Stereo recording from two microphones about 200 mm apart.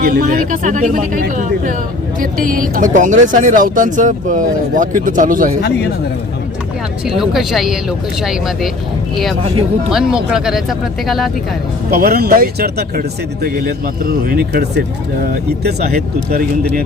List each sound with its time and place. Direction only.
0.0 s speech: 45° right (ahead or behind)
7.0 s speech: centre (ahead or behind)
9.9 s speech: 5° right (ahead or behind)
11.9 s speech: 50° right (ahead or behind)